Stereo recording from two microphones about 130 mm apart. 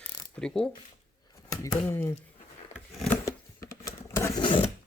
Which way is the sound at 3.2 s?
25° left (ahead or behind).